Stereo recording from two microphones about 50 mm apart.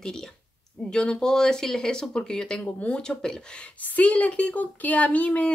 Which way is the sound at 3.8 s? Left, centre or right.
Left.